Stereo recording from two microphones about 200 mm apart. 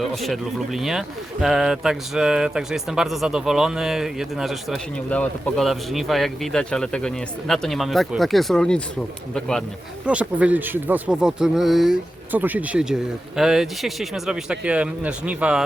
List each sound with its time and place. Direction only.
0.0 s speech: centre (ahead or behind)